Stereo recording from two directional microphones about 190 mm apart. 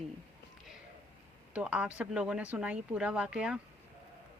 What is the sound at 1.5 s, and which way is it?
Speech, 5° right (ahead or behind).